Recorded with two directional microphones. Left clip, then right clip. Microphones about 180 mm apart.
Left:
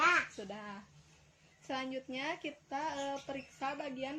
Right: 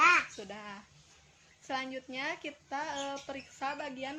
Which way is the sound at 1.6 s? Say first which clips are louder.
Right 2 dB; 20° left (ahead or behind).